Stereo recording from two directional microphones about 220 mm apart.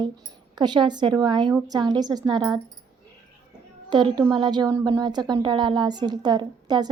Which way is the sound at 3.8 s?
20° right (ahead or behind).